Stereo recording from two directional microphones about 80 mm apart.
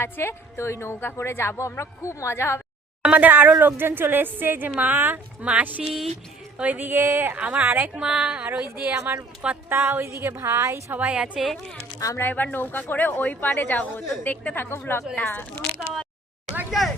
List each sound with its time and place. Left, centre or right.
0.0 s a woman's voice: left
3.0 s speech: centre
5.8 s speech: centre
6.6 s speech: right
7.3 s speech: centre
8.6 s speech: right
10.9 s speech: centre
11.9 s speech: left
12.2 s speech: left